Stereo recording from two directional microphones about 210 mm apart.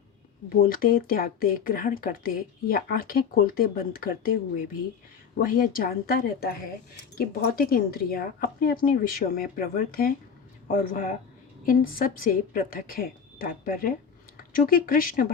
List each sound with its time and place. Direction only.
0.5 s speech: 45° left (ahead or behind)
5.4 s speech: 45° left (ahead or behind)